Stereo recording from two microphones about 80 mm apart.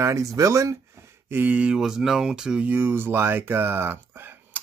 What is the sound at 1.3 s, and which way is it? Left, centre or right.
Speech, right.